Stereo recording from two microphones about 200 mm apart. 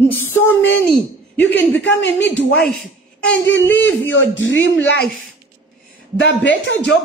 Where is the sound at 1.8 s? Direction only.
65° left (ahead or behind).